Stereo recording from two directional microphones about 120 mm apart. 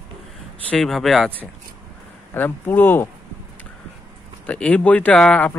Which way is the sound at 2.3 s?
15° left (ahead or behind).